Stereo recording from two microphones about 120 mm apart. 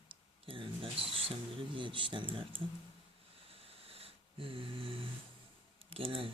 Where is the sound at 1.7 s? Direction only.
40° right (ahead or behind).